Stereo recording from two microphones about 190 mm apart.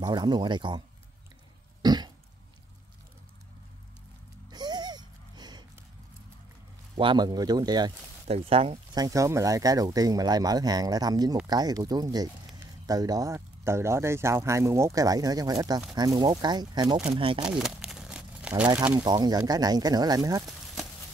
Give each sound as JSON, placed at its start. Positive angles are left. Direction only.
{"t": 0.0, "sound": "speech", "side_deg": -20}
{"t": 1.8, "sound": "throat clearing", "side_deg": -20}
{"t": 4.5, "sound": "a sound", "side_deg": -20}
{"t": 7.0, "sound": "speech", "side_deg": -25}
{"t": 17.4, "sound": "a sound", "side_deg": -5}
{"t": 18.9, "sound": "speech", "side_deg": -20}